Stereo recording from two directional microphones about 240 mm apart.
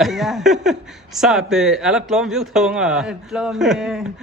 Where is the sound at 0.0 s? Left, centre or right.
Centre.